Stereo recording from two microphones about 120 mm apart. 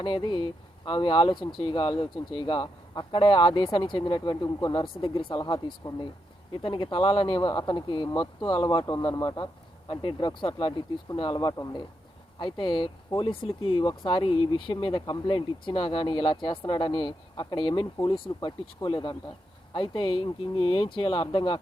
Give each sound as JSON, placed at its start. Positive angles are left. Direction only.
{"t": 0.0, "sound": "speech", "side_deg": 40}
{"t": 12.4, "sound": "speech", "side_deg": 40}
{"t": 18.3, "sound": "speech", "side_deg": 35}
{"t": 18.9, "sound": "speech", "side_deg": 45}